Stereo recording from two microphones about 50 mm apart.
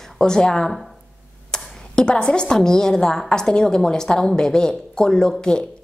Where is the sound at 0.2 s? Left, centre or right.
Centre.